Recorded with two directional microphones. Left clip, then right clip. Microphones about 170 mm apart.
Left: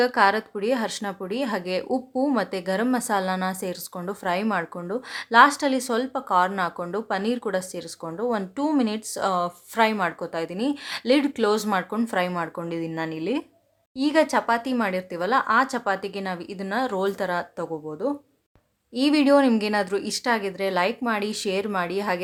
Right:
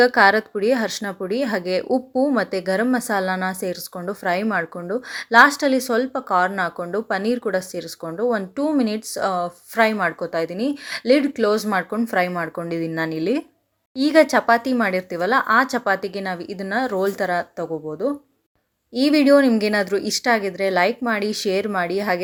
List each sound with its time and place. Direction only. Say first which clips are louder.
0.0 s speech: right 5 dB; 20° right (ahead or behind)